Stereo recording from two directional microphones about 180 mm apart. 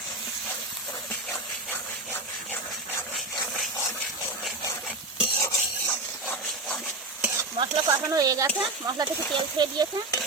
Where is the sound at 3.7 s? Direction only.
15° left (ahead or behind).